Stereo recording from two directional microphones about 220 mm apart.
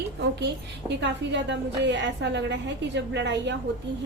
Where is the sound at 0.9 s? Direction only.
55° right (ahead or behind).